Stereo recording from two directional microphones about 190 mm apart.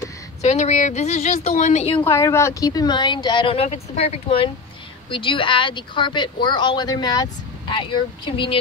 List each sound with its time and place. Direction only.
0.4 s a woman's voice: 35° left (ahead or behind)
2.0 s speech: 15° left (ahead or behind)